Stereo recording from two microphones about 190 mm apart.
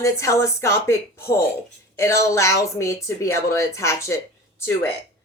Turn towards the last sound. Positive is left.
turn(degrees=10)  # may be behind; listen again after turning